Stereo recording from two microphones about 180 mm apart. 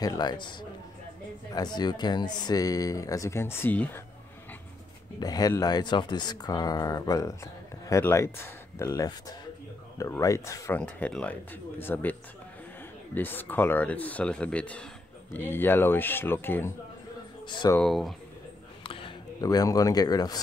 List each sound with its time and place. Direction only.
0.0 s speech: 20° left (ahead or behind)
5.2 s speech: 20° left (ahead or behind)
10.8 s speech: 5° left (ahead or behind)
17.5 s speech: 25° left (ahead or behind)
17.7 s speech: centre (ahead or behind)
18.9 s speech: 30° left (ahead or behind)